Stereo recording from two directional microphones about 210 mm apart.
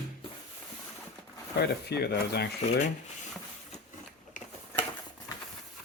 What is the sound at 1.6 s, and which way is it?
Speech, 50° left (ahead or behind).